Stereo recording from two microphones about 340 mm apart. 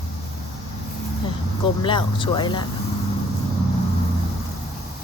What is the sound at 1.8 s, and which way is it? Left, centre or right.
Speech, centre.